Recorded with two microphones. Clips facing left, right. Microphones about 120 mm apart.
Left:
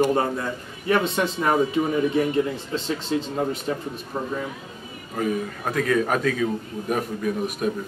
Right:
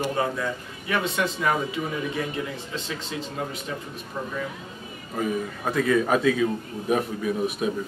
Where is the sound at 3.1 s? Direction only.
40° left (ahead or behind).